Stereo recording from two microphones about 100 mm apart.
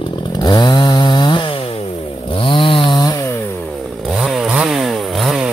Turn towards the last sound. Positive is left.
turn(degrees=0)  # may be behind; listen again after turning